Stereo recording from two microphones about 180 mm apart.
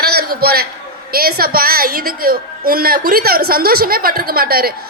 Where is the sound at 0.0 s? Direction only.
60° right (ahead or behind).